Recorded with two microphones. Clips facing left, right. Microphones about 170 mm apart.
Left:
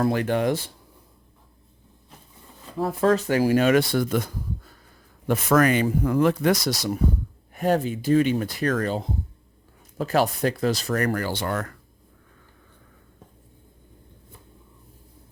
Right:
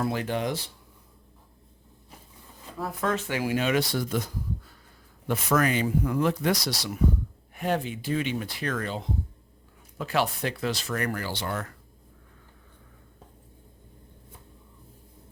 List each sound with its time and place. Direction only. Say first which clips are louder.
0.0 s speech: left 6 dB; 60° left (ahead or behind)
2.7 s speech: left 8 dB; 30° left (ahead or behind); by 11.5 s 50° left (ahead or behind)